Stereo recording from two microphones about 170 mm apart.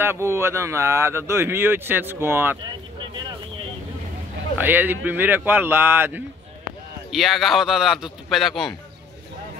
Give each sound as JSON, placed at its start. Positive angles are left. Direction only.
{"t": 0.0, "sound": "speech", "side_deg": -15}
{"t": 2.6, "sound": "a sound", "side_deg": -25}
{"t": 4.6, "sound": "speech", "side_deg": -10}
{"t": 7.1, "sound": "speech", "side_deg": 0}